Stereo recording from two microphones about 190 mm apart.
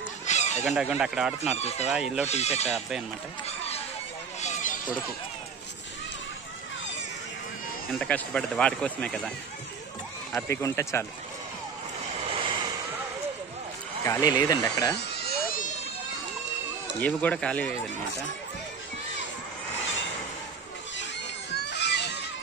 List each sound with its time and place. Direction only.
0.3 s chicken: 35° left (ahead or behind)
0.7 s speech: 5° right (ahead or behind)
1.6 s speech: 35° left (ahead or behind)
1.9 s speech: 5° right (ahead or behind)
2.2 s speech: 35° left (ahead or behind)
3.4 s a sound: 35° left (ahead or behind)
8.0 s speech: 5° left (ahead or behind)
10.5 s speech: 15° left (ahead or behind)
12.1 s vehicle: 30° right (ahead or behind)
14.0 s speech: 20° left (ahead or behind)
17.0 s speech: 5° left (ahead or behind)
21.6 s a sound: 65° left (ahead or behind)